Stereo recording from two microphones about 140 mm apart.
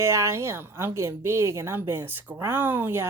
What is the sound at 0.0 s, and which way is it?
A woman's voice, 20° right (ahead or behind).